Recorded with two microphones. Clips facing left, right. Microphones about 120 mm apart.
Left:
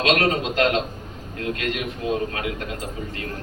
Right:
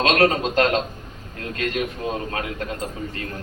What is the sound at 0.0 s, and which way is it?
A man's voice, 40° right (ahead or behind).